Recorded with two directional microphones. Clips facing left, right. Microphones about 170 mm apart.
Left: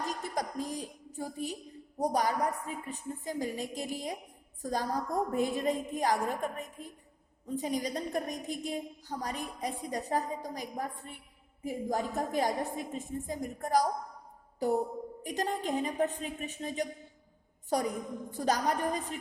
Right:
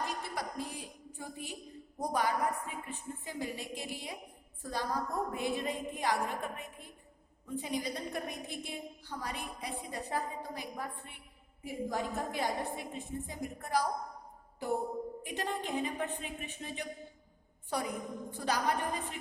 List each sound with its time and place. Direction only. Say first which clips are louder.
0.0 s music: left 3 dB; 45° left (ahead or behind)
2.0 s a woman's voice: left 3 dB; 40° left (ahead or behind)